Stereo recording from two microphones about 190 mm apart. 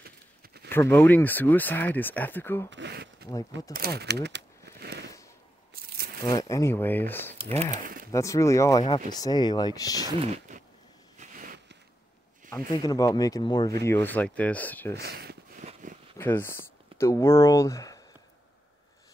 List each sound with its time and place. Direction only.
0.7 s speech: 10° left (ahead or behind)
2.7 s speech: 65° right (ahead or behind)
5.8 s a sound: 55° right (ahead or behind)
6.2 s speech: 20° left (ahead or behind)
7.4 s speech: 40° right (ahead or behind)
8.1 s speech: 15° left (ahead or behind)
10.2 s zipper: 35° right (ahead or behind)
11.1 s a sound: 45° right (ahead or behind)
12.7 s speech: 20° left (ahead or behind)
13.8 s speech: 10° left (ahead or behind)
15.0 s speech: 55° right (ahead or behind)
15.6 s a sound: 40° right (ahead or behind)
16.2 s speech: 10° left (ahead or behind)